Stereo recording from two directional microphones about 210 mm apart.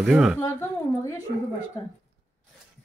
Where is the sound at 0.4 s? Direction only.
15° left (ahead or behind).